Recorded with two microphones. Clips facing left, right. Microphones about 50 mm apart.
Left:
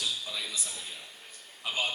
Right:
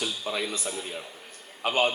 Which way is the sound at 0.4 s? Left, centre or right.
Right.